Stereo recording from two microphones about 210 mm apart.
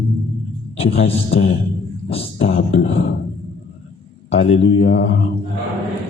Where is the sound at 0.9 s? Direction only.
30° left (ahead or behind).